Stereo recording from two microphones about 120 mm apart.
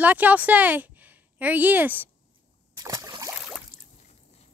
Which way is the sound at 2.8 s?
30° right (ahead or behind).